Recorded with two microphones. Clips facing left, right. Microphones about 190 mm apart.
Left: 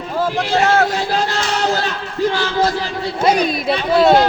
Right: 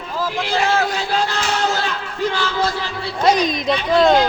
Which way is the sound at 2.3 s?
40° left (ahead or behind).